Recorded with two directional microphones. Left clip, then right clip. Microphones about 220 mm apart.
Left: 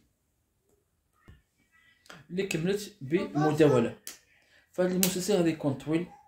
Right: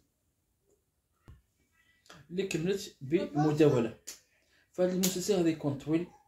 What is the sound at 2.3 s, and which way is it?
Speech, 15° left (ahead or behind).